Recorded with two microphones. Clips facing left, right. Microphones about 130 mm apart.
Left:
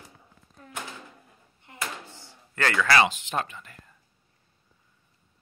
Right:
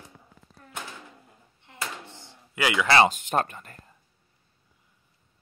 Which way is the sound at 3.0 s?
45° right (ahead or behind).